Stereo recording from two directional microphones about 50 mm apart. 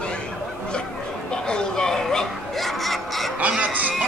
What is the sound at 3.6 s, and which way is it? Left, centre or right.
Music, right.